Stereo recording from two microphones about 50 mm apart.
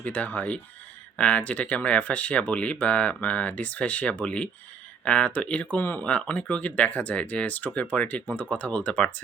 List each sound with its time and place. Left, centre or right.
0.0 s speech: left
5.7 s speech: left
6.0 s speech: left